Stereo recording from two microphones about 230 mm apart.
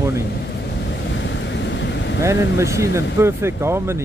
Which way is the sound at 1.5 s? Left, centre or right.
Left.